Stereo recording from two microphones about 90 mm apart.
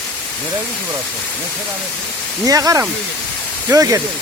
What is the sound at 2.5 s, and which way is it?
Speech, 40° right (ahead or behind).